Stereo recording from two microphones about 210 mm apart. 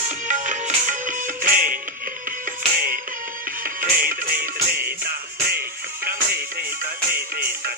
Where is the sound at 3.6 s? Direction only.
40° right (ahead or behind).